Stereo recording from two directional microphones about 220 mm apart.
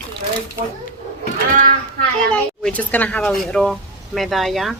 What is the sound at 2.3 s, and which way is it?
Speech, 5° left (ahead or behind).